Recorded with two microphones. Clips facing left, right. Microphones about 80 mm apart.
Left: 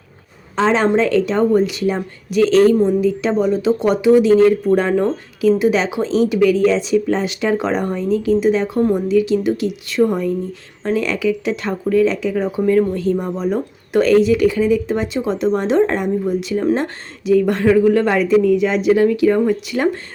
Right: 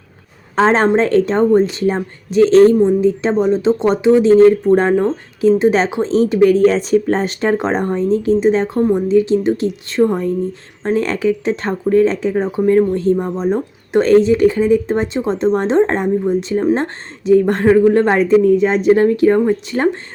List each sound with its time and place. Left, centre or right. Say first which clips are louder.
0.5 s speech: right 3 dB; right
8.8 s speech: right 2 dB; centre
9.0 s speech: right 2 dB; right